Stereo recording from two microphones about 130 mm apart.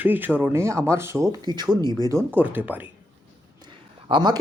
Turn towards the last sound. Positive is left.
turn(degrees=-35)  # may be behind; listen again after turning